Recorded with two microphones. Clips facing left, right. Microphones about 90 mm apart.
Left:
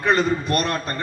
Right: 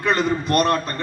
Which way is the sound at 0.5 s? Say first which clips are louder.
Right 5 dB; 40° right (ahead or behind).